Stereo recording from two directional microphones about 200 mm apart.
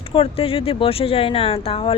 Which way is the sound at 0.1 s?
30° left (ahead or behind).